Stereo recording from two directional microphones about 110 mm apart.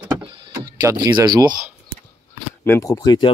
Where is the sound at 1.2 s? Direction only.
40° right (ahead or behind).